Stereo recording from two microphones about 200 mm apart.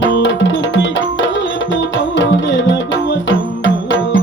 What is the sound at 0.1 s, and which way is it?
Tabla, 65° left (ahead or behind).